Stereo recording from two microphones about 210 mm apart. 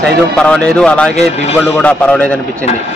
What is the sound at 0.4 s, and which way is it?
Speech, 5° left (ahead or behind).